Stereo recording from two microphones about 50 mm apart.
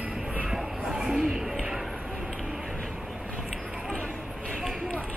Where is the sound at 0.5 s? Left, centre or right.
Centre.